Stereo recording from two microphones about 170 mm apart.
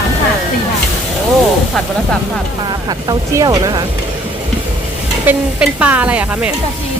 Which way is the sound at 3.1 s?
20° right (ahead or behind).